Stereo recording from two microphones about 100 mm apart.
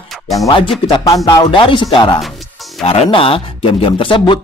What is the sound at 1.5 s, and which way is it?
Speech, 55° left (ahead or behind).